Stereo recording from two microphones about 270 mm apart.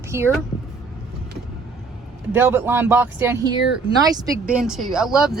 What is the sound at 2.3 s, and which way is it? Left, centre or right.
Speech, centre.